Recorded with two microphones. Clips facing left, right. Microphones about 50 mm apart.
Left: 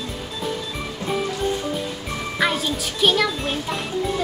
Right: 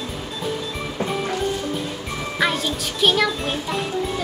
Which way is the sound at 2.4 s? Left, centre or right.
Centre.